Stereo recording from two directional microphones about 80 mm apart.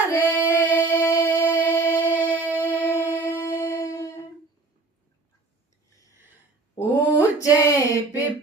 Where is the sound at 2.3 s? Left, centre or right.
Right.